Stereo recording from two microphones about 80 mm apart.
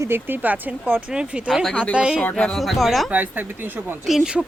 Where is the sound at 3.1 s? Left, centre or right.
Right.